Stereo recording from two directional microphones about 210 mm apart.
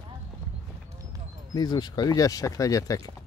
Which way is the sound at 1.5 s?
20° left (ahead or behind).